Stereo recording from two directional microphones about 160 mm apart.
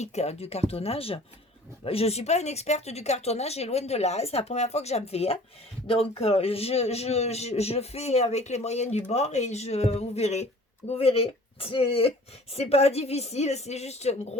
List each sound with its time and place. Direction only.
0.0 s a man's voice: 45° left (ahead or behind)